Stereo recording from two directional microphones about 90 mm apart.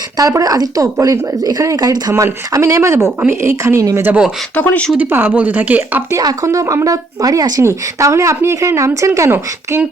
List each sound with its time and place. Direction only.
0.2 s speech: 40° right (ahead or behind)
2.2 s a woman's voice: 35° right (ahead or behind)
4.5 s speech: 15° left (ahead or behind)
4.9 s speech: 20° right (ahead or behind)
6.1 s speech: 35° right (ahead or behind)